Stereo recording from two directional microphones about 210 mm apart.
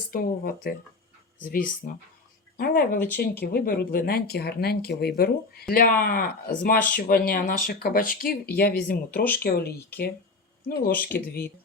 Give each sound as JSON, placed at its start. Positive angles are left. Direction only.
{"t": 0.1, "sound": "speech", "side_deg": 45}